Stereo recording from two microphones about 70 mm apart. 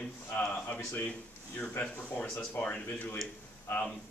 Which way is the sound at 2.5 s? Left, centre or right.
Left.